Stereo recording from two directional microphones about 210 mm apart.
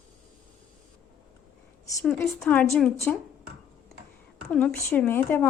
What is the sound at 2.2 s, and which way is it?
Speech, 10° left (ahead or behind).